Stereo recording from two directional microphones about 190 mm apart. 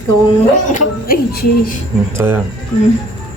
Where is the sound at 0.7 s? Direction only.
50° left (ahead or behind).